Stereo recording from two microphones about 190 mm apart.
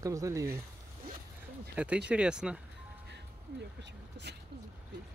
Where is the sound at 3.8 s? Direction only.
65° right (ahead or behind).